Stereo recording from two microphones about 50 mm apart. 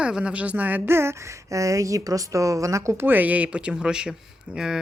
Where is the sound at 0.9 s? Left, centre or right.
Right.